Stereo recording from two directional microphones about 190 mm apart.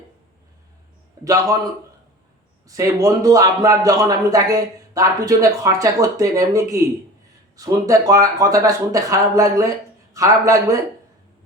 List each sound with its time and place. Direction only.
1.2 s speech: 15° right (ahead or behind)
2.6 s speech: 20° right (ahead or behind)